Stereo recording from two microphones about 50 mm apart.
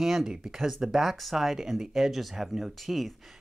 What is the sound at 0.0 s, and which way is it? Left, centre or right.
Speech, centre.